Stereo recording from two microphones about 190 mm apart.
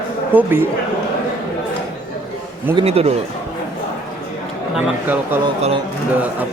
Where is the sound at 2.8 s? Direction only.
30° right (ahead or behind).